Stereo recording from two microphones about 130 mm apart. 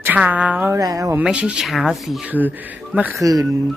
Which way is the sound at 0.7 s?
25° right (ahead or behind).